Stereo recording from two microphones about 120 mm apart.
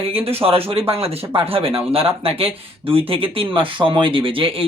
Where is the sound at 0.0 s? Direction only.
50° right (ahead or behind).